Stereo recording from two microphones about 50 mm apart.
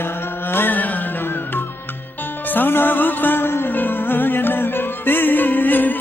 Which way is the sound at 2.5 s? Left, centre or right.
Left.